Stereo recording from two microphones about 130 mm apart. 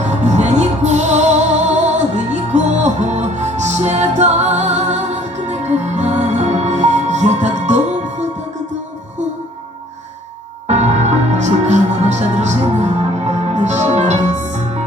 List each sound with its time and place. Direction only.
0.0 s music: 60° right (ahead or behind)
10.7 s music: 60° right (ahead or behind)